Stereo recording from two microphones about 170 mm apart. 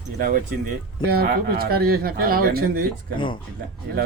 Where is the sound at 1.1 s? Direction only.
65° right (ahead or behind).